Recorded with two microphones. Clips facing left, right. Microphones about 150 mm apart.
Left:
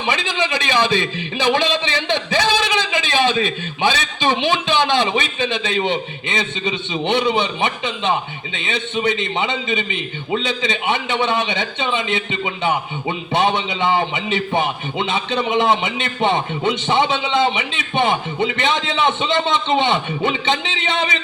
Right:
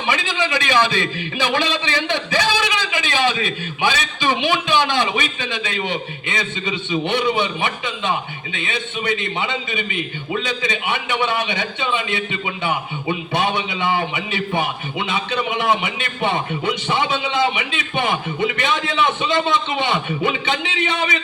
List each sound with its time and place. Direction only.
0.1 s a man's voice: 20° left (ahead or behind)